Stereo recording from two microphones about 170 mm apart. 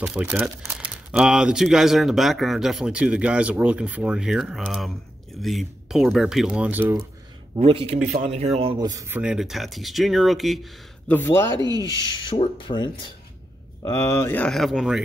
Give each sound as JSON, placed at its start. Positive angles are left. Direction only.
{"t": 0.0, "sound": "speech", "side_deg": -5}
{"t": 7.5, "sound": "speech", "side_deg": -35}
{"t": 9.2, "sound": "speech", "side_deg": -5}
{"t": 11.1, "sound": "speech", "side_deg": 15}
{"t": 12.2, "sound": "speech", "side_deg": 30}